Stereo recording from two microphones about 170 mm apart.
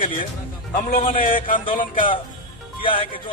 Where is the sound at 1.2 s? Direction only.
50° left (ahead or behind).